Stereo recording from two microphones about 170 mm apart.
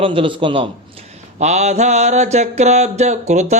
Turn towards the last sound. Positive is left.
turn(degrees=-45)  # may be behind; listen again after turning